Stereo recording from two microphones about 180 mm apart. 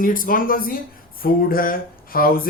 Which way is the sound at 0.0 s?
50° left (ahead or behind).